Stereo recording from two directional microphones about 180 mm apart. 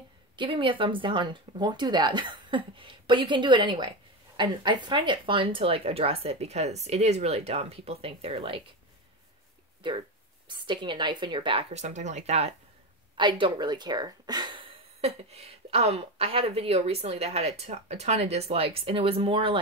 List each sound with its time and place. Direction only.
0.4 s speech: 30° right (ahead or behind)
10.5 s speech: 25° right (ahead or behind)
13.2 s speech: 25° right (ahead or behind)